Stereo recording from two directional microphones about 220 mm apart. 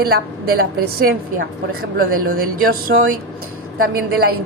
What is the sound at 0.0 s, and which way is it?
A woman's voice, 45° right (ahead or behind).